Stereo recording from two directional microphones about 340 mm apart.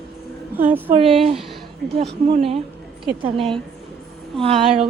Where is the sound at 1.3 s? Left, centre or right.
Centre.